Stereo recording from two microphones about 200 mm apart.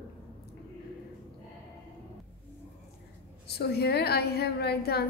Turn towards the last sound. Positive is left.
turn(degrees=55)  # may be behind; listen again after turning